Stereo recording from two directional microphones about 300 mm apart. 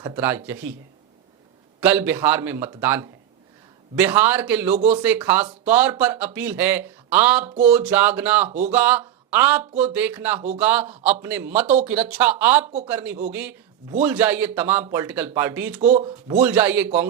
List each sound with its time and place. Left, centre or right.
0.0 s speech: centre
1.8 s speech: centre
8.4 s speech: right
8.7 s speech: centre
15.8 s speech: right
16.4 s speech: centre